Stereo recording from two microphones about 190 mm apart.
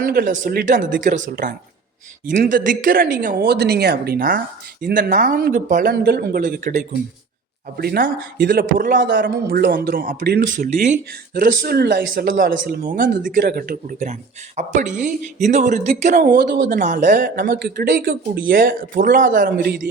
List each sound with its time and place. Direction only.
0.0 s a man's voice: 50° right (ahead or behind)
16.1 s a woman's voice: 50° right (ahead or behind)
17.2 s a man's voice: 55° right (ahead or behind)